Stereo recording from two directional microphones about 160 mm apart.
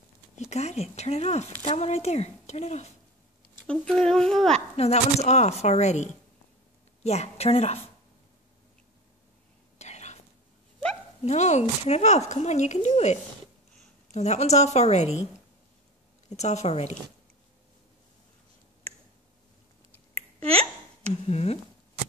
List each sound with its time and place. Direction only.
0.4 s speech: 45° left (ahead or behind)
3.6 s speech: 5° left (ahead or behind)
4.7 s a woman's voice: 40° left (ahead or behind)
9.8 s whispering: 45° left (ahead or behind)
11.2 s speech: 45° left (ahead or behind)
16.3 s speech: 45° left (ahead or behind)
21.1 s a woman's voice: 40° left (ahead or behind)